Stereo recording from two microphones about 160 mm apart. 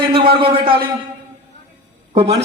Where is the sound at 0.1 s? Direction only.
35° right (ahead or behind).